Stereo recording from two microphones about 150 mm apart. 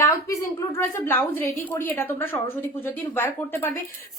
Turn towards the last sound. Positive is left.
turn(degrees=15)  # may be behind; listen again after turning